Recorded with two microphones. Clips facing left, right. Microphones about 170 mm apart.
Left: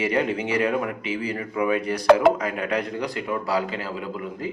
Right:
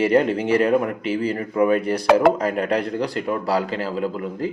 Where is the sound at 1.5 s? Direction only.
45° right (ahead or behind).